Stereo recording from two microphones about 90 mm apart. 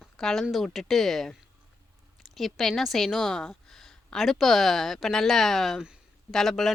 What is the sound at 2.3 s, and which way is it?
Speech, centre (ahead or behind).